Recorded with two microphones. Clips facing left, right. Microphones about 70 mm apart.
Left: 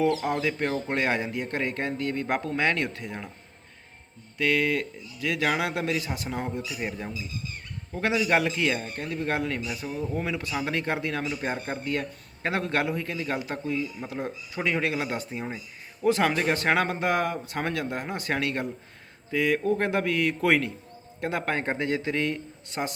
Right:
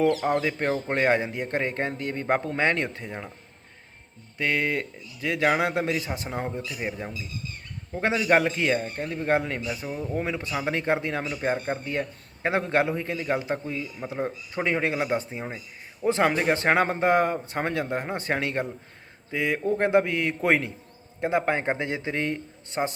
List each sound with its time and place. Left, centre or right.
0.3 s a man's voice: right
4.4 s a man's voice: right
7.9 s a man's voice: right
11.3 s a man's voice: centre